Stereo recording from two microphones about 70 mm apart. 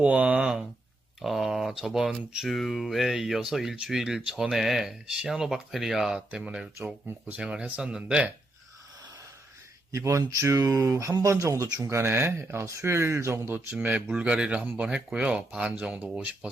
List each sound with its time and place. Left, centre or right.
0.0 s speech: centre
9.9 s speech: right
10.8 s speech: right
13.9 s speech: centre